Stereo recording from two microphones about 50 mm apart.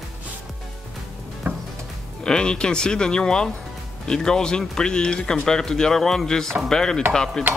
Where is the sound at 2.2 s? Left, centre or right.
Centre.